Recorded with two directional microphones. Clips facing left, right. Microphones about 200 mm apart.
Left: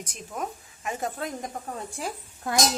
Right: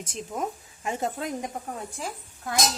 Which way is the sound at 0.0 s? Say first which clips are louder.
Right 3 dB; 25° right (ahead or behind).